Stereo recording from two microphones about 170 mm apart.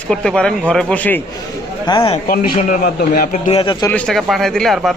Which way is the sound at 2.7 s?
60° left (ahead or behind).